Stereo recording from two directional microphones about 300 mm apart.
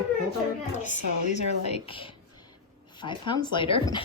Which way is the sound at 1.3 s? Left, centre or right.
Left.